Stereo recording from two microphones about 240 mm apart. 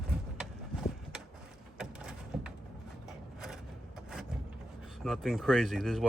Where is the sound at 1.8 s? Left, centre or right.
Centre.